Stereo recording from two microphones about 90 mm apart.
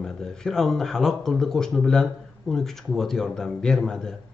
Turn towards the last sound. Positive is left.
turn(degrees=5)  # may be behind; listen again after turning